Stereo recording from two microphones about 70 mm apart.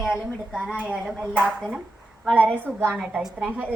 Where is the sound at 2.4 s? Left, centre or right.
Right.